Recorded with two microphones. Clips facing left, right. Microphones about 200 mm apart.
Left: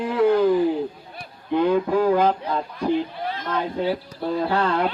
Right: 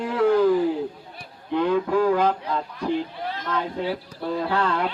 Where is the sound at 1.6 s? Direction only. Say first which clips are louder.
Left 1 dB; 25° left (ahead or behind).